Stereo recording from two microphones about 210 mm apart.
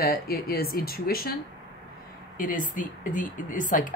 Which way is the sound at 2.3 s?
40° left (ahead or behind).